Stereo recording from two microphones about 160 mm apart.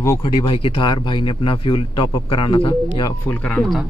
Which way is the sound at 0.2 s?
30° left (ahead or behind).